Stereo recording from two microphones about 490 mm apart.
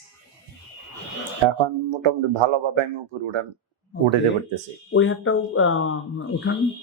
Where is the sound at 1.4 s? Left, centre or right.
Right.